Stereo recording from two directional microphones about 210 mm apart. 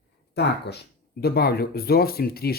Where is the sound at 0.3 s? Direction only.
55° left (ahead or behind).